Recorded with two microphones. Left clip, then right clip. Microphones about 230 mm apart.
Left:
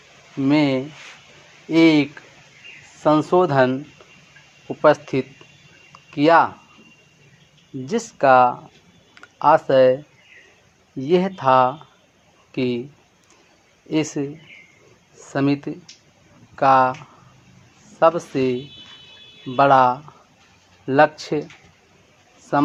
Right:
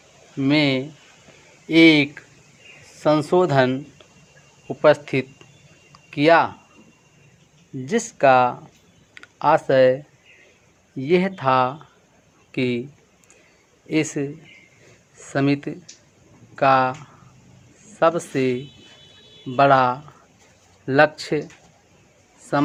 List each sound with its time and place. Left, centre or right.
0.4 s speech: right
5.9 s a sound: centre
8.2 s speech: centre
11.0 s speech: right
13.9 s speech: right
18.0 s speech: right
22.5 s speech: right